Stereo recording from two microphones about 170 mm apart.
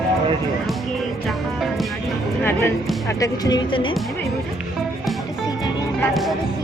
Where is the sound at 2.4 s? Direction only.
15° left (ahead or behind); by 3.9 s 30° left (ahead or behind).